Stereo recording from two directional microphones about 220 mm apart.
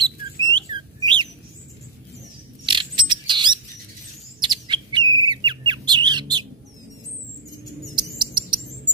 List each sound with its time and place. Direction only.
0.0 s bird: 20° right (ahead or behind)
2.6 s mechanisms: 20° right (ahead or behind)
4.4 s bird: 20° right (ahead or behind)
7.9 s chirp: 20° right (ahead or behind)